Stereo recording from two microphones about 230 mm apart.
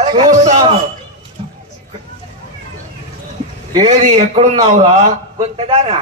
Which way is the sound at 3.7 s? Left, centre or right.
Right.